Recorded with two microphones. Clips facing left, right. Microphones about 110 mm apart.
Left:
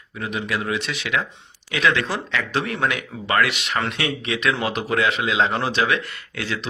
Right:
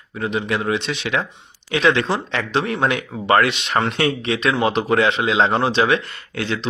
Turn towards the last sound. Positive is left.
turn(degrees=-30)  # may be behind; listen again after turning